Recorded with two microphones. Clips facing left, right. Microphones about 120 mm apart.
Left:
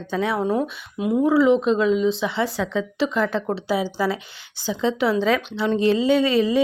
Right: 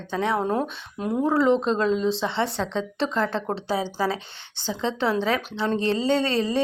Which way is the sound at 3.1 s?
25° right (ahead or behind).